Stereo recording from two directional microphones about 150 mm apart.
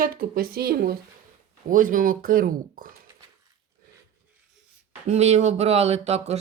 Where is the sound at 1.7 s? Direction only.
65° right (ahead or behind).